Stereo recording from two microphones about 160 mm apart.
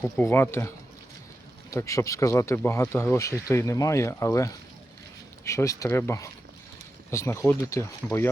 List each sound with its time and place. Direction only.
0.0 s speech: 15° left (ahead or behind)
1.7 s speech: 20° left (ahead or behind)